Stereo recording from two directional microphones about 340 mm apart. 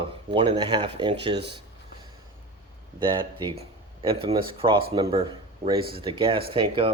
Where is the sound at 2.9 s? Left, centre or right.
Centre.